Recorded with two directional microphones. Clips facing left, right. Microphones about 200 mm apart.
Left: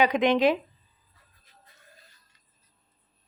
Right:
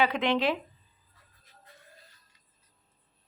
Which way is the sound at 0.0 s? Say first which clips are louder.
Left 5 dB; 15° left (ahead or behind).